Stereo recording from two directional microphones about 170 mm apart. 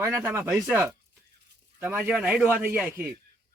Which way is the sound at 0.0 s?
15° right (ahead or behind).